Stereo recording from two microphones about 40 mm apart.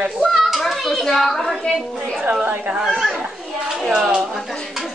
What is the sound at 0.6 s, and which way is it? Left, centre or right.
Speech, centre.